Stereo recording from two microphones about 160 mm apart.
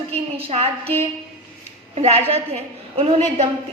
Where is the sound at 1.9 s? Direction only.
40° right (ahead or behind).